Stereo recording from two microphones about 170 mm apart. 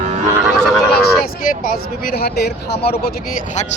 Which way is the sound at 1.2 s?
60° left (ahead or behind).